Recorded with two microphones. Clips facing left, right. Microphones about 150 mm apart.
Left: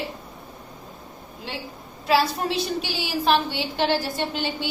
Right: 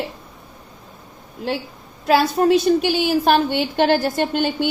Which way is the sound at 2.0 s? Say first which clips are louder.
Right 6 dB; 55° right (ahead or behind).